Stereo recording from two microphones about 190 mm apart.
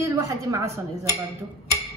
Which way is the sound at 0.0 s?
15° right (ahead or behind).